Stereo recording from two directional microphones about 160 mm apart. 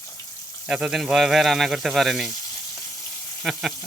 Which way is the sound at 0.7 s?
5° right (ahead or behind).